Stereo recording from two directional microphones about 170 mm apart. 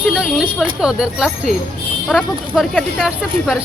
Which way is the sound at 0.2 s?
5° right (ahead or behind).